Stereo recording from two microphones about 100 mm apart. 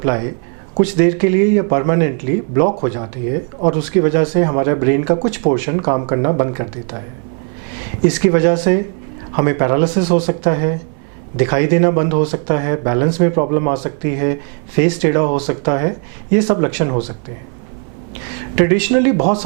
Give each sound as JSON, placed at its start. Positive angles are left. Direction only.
{"t": 0.0, "sound": "speech", "side_deg": -20}
{"t": 8.0, "sound": "speech", "side_deg": -15}
{"t": 18.5, "sound": "speech", "side_deg": -15}